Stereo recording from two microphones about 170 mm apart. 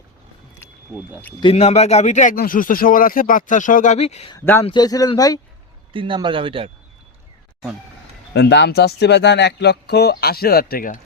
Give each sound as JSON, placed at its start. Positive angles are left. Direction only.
{"t": 0.6, "sound": "a sound", "side_deg": 15}
{"t": 1.4, "sound": "speech", "side_deg": 35}
{"t": 4.4, "sound": "speech", "side_deg": 15}
{"t": 4.6, "sound": "speech", "side_deg": 25}
{"t": 5.9, "sound": "speech", "side_deg": -30}
{"t": 8.3, "sound": "speech", "side_deg": 90}